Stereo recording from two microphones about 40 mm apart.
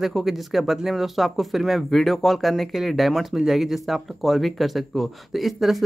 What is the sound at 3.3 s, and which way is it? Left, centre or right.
Speech, centre.